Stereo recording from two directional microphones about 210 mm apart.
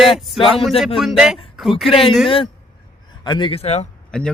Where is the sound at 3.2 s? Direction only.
20° left (ahead or behind).